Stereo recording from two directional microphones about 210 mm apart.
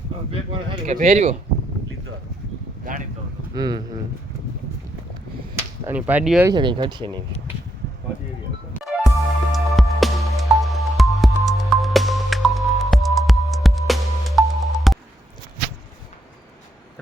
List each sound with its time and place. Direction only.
0.3 s speech: 25° right (ahead or behind)
2.8 s a sound: 40° right (ahead or behind)
3.5 s speech: 20° right (ahead or behind)
5.5 s whip: 10° right (ahead or behind)
6.5 s speech: 20° right (ahead or behind)
8.8 s music: centre (ahead or behind)